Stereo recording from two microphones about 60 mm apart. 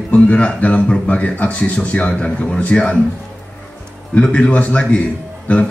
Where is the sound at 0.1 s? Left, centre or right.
Left.